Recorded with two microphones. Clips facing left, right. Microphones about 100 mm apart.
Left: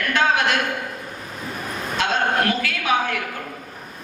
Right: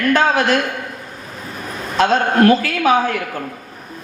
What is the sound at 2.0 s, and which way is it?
Speech, 35° right (ahead or behind).